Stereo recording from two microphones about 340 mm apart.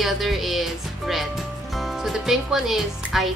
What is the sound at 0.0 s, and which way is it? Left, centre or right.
Music, centre.